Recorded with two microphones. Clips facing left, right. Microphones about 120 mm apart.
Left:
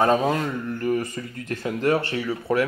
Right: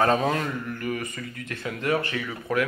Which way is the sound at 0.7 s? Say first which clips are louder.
Left 6 dB; 30° left (ahead or behind).